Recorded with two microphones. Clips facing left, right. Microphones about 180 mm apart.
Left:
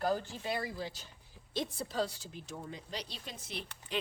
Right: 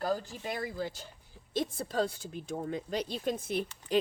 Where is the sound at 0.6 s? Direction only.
50° right (ahead or behind).